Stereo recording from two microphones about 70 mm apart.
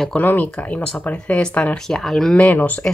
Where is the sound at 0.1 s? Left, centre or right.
Left.